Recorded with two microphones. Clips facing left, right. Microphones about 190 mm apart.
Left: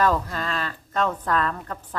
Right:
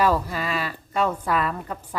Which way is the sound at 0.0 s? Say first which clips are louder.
Right 1 dB; 10° right (ahead or behind).